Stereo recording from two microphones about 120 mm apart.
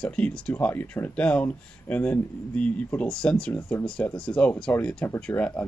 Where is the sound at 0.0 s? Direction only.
10° left (ahead or behind).